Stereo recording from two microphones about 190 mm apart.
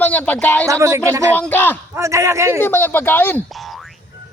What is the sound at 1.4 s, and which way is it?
Speech, 10° left (ahead or behind).